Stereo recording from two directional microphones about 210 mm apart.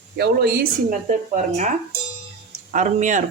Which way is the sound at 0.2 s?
50° right (ahead or behind).